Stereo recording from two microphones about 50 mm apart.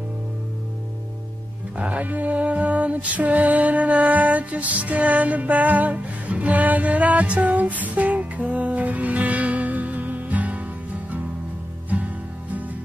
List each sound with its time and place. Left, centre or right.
1.8 s music: right
11.9 s music: right